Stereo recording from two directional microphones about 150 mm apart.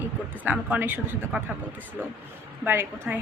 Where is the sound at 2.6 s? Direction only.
15° right (ahead or behind).